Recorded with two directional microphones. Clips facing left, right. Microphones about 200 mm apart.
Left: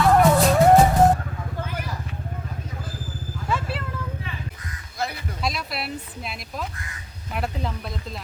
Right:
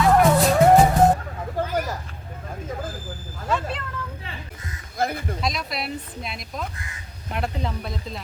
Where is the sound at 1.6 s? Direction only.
45° right (ahead or behind).